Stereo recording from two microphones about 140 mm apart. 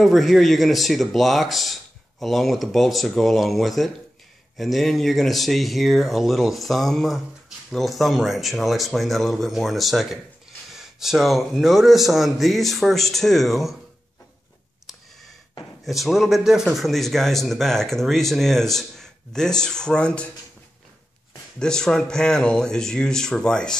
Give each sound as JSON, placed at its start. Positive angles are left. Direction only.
{"t": 0.0, "sound": "speech", "side_deg": 0}
{"t": 15.8, "sound": "speech", "side_deg": 0}
{"t": 21.5, "sound": "speech", "side_deg": 5}